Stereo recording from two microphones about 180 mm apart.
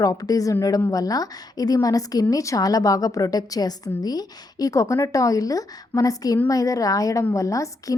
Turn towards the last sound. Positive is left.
turn(degrees=20)  # may be behind; listen again after turning